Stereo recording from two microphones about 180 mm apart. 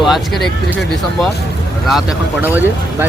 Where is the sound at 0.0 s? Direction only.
Centre (ahead or behind).